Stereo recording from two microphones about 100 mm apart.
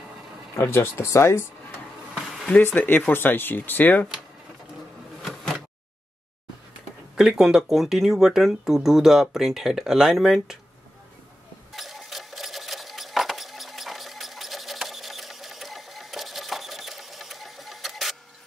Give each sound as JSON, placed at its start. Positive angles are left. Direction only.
{"t": 0.6, "sound": "speech", "side_deg": 25}
{"t": 2.1, "sound": "a sound", "side_deg": -5}
{"t": 2.6, "sound": "speech", "side_deg": 20}
{"t": 5.2, "sound": "insect", "side_deg": 5}
{"t": 7.2, "sound": "speech", "side_deg": -5}
{"t": 11.7, "sound": "sewing machine", "side_deg": 0}